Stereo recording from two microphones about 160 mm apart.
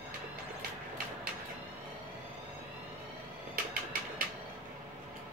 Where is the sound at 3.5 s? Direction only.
65° right (ahead or behind).